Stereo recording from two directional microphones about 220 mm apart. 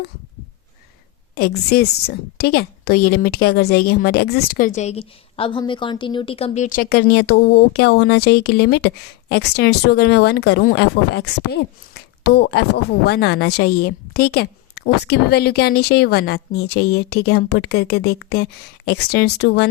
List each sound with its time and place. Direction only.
1.4 s a woman's voice: 45° left (ahead or behind)